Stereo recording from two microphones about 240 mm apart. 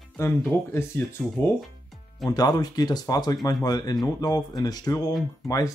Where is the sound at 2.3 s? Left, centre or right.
Centre.